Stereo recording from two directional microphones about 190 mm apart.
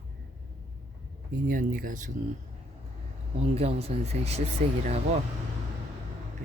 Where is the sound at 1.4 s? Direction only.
45° right (ahead or behind).